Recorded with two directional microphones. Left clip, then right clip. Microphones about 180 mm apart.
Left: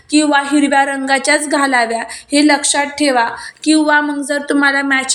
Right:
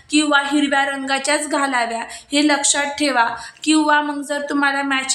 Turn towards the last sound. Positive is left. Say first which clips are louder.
# left 5 dB
turn(degrees=20)  # may be behind; listen again after turning